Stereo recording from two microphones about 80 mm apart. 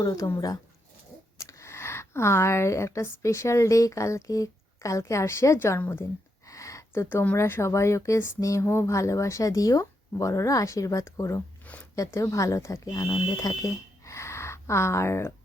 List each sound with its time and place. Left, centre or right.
0.0 s speech: left
1.4 s a woman's voice: left
6.4 s speech: left
11.6 s a sound: centre
11.9 s speech: left
12.9 s speech: left